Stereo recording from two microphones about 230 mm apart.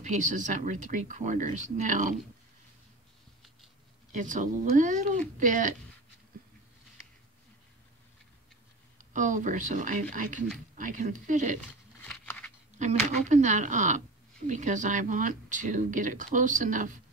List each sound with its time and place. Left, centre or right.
0.0 s speech: right
4.1 s speech: right
8.9 s speech: right
12.0 s a sound: centre
12.7 s speech: right